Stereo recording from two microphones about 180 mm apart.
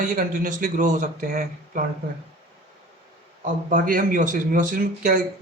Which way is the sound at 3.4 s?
50° right (ahead or behind).